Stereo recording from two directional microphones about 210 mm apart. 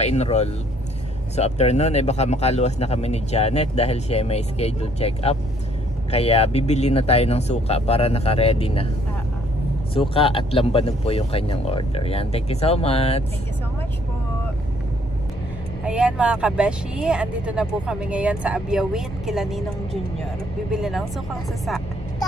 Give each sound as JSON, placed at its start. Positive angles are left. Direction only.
{"t": 0.0, "sound": "speech", "side_deg": 30}
{"t": 9.9, "sound": "speech", "side_deg": 25}
{"t": 15.8, "sound": "speech", "side_deg": -5}